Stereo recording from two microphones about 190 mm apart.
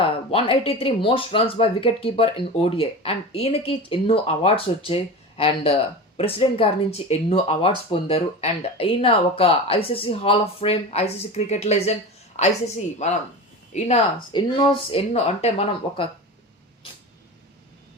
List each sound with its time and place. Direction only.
0.0 s a woman's voice: 30° left (ahead or behind)